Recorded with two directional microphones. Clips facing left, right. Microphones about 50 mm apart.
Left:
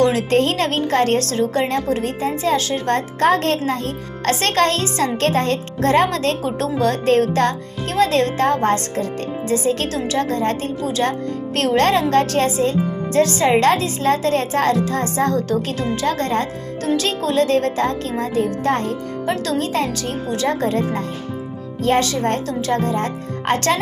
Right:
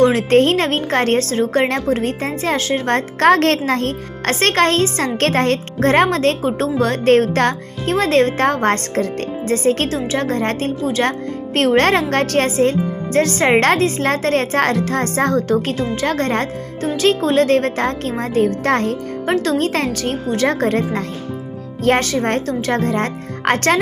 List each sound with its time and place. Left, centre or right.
0.0 s speech: right
3.2 s speech: right
4.2 s speech: right
18.7 s speech: right